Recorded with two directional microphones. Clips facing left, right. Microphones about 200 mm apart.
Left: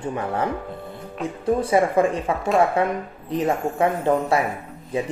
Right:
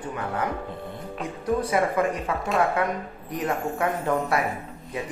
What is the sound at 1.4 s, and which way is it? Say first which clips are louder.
Speech: left 4 dB; 30° left (ahead or behind).